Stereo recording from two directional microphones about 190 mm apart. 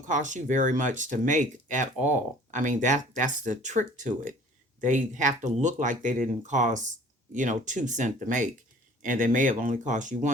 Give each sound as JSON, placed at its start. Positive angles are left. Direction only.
{"t": 0.1, "sound": "speech", "side_deg": -40}